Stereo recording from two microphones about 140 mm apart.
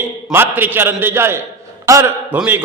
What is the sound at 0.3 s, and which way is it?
A man's voice, 15° right (ahead or behind).